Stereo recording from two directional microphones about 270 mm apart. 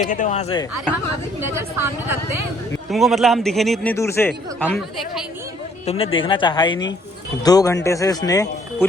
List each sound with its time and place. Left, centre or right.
0.0 s speech: left
1.4 s a woman's voice: right
2.9 s a man's voice: centre
5.8 s speech: left